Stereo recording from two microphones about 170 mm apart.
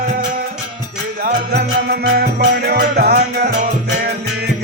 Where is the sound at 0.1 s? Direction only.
55° right (ahead or behind).